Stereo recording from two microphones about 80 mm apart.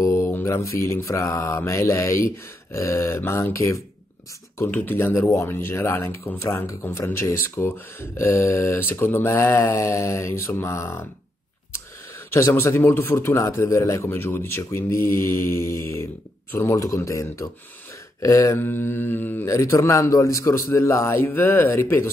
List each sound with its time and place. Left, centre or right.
0.0 s mantra: left
1.7 s speech: left
4.6 s speech: left
12.3 s speech: left
19.5 s speech: left